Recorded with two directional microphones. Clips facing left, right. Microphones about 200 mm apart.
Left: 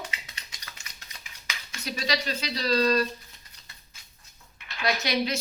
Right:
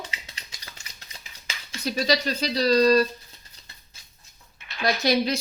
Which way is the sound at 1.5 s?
35° right (ahead or behind).